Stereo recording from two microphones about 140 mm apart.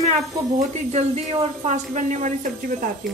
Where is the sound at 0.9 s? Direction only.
50° right (ahead or behind).